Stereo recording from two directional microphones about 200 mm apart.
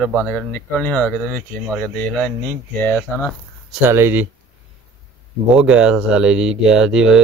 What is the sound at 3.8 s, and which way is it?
Speech, 10° right (ahead or behind).